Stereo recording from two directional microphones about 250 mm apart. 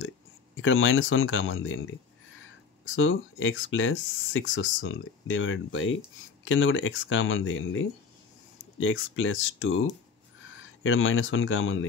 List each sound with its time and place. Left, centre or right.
0.6 s speech: left
3.0 s speech: left